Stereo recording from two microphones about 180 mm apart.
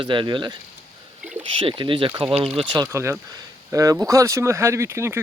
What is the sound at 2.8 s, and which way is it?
Speech, 15° right (ahead or behind).